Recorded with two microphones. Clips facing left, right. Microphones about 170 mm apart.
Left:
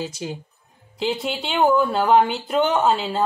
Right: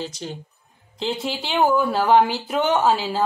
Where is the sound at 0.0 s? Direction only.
10° left (ahead or behind).